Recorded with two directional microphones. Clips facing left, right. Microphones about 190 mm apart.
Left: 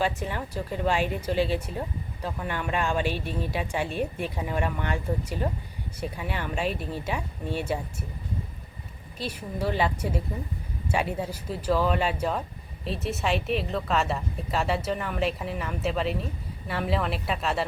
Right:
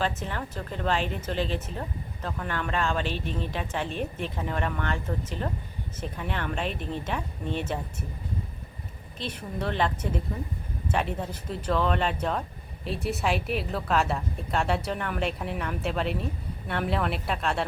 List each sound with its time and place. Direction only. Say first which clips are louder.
0.0 s speech: left 2 dB; 10° left (ahead or behind)
9.1 s a woman's voice: left 1 dB; 10° left (ahead or behind)